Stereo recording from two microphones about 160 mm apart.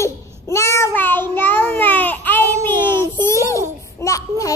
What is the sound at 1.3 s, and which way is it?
Child singing, 15° left (ahead or behind).